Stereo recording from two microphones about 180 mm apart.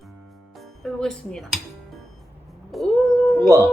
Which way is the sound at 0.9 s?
5° left (ahead or behind).